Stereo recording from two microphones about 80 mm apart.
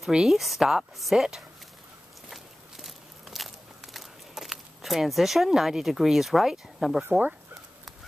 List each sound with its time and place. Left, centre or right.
0.0 s a woman's voice: centre
2.2 s walk: centre
7.1 s speech: centre